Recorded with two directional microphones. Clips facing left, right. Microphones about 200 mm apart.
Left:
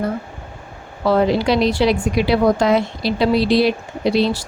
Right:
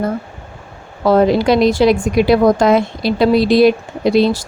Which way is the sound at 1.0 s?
45° right (ahead or behind).